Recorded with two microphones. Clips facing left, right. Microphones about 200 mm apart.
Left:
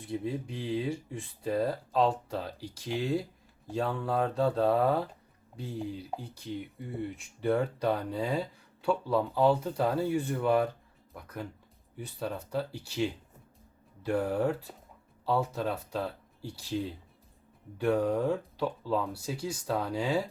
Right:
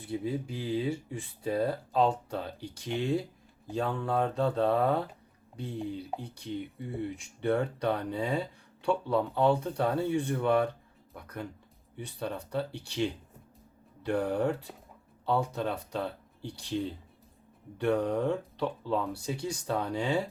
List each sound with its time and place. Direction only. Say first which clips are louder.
0.0 s speech: right 1 dB; centre (ahead or behind)